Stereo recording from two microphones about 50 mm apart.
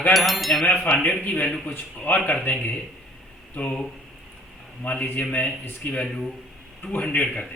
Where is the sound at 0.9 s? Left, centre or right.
Centre.